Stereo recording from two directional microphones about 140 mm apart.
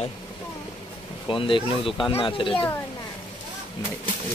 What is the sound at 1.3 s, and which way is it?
Speech, 35° left (ahead or behind).